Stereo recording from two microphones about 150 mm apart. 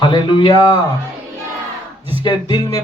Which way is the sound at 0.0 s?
30° left (ahead or behind).